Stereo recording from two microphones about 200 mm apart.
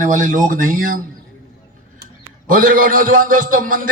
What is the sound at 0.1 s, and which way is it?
Speech, 40° right (ahead or behind).